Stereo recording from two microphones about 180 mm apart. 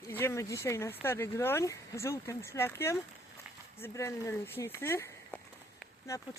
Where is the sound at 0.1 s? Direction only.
15° left (ahead or behind).